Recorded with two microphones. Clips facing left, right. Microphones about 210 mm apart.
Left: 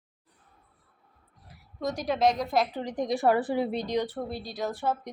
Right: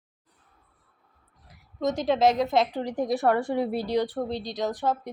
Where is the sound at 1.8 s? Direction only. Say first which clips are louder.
Right 4 dB; 20° right (ahead or behind).